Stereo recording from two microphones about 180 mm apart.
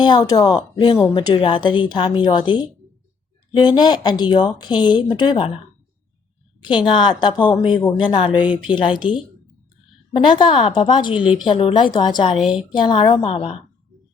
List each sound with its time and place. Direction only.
0.0 s speech: 20° left (ahead or behind)
6.6 s speech: 25° left (ahead or behind)
11.1 s a woman's voice: 5° right (ahead or behind)
11.4 s a woman's voice: 30° left (ahead or behind)